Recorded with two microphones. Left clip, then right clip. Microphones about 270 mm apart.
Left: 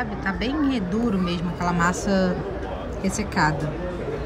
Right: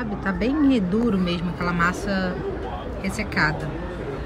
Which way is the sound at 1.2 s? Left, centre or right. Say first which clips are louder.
Even; centre.